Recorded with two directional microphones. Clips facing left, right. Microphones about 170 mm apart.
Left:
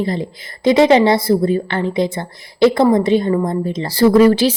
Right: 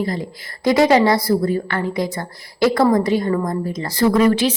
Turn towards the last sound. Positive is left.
turn(degrees=35)  # may be behind; listen again after turning